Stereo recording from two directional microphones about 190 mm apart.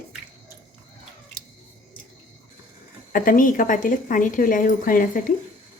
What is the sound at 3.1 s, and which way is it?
A woman's voice, 45° left (ahead or behind).